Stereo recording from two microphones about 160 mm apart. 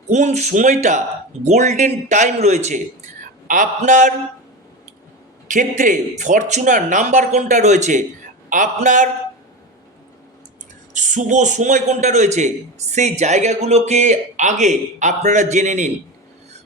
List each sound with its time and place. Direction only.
0.1 s a man's voice: 45° right (ahead or behind)
5.5 s a man's voice: 55° right (ahead or behind)
10.9 s a man's voice: 50° right (ahead or behind)